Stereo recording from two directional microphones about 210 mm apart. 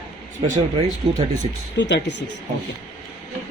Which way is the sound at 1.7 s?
55° left (ahead or behind).